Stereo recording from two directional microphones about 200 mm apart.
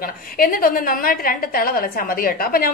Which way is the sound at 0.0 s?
45° left (ahead or behind).